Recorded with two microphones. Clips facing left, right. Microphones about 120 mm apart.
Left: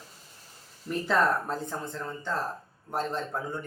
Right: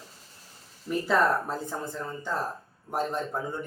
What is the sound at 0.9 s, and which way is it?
Speech, 5° right (ahead or behind).